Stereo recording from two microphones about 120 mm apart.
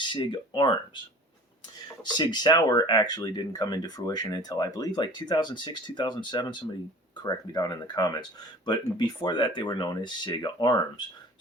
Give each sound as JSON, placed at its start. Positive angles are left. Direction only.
{"t": 0.0, "sound": "speech", "side_deg": 45}
{"t": 2.1, "sound": "speech", "side_deg": 35}